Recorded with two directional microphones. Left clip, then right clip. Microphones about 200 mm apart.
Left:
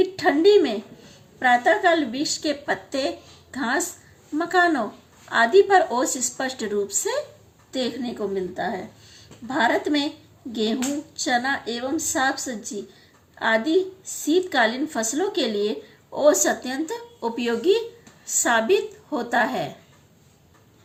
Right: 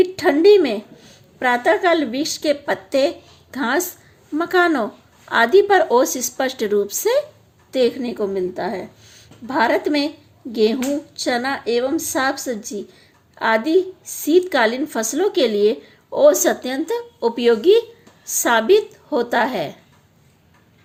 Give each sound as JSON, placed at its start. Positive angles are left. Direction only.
{"t": 0.0, "sound": "a woman's voice", "side_deg": -45}